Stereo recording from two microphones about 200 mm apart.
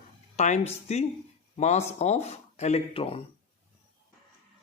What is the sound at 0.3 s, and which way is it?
Speech, 35° left (ahead or behind).